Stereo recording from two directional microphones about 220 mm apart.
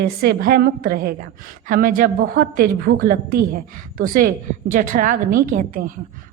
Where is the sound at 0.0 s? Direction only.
45° right (ahead or behind).